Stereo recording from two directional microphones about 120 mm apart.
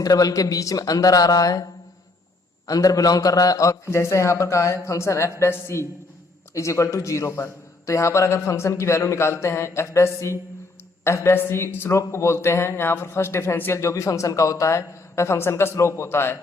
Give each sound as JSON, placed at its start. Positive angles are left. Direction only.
{"t": 0.0, "sound": "a man's voice", "side_deg": 30}